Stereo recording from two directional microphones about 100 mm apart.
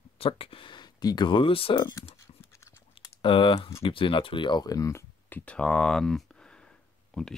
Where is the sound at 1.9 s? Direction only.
30° left (ahead or behind).